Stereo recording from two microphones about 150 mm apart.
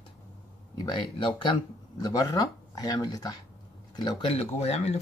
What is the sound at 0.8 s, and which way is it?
Speech, 30° left (ahead or behind).